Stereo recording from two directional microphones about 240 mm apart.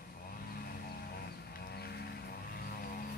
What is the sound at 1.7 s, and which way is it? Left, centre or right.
Vehicle, left.